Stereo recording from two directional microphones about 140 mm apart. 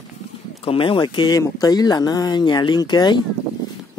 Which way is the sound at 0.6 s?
40° left (ahead or behind).